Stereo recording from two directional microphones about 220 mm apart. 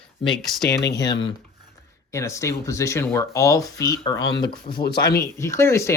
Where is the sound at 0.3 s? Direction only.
Centre (ahead or behind).